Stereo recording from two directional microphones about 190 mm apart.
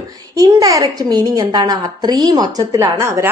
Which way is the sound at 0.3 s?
20° right (ahead or behind).